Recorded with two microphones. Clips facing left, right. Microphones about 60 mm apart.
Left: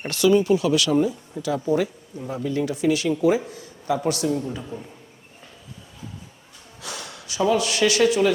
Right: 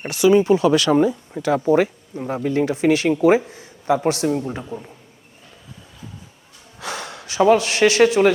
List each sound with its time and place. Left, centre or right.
0.0 s a man's voice: centre; by 4.6 s right
6.7 s snort: right
7.6 s speech: right